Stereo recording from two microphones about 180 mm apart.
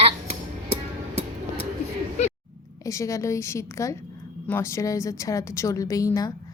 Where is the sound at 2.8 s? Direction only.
15° left (ahead or behind).